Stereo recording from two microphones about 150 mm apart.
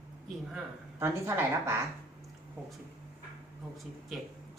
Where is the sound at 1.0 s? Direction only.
15° right (ahead or behind).